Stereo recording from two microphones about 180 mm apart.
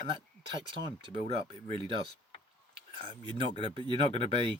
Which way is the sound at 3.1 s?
25° right (ahead or behind).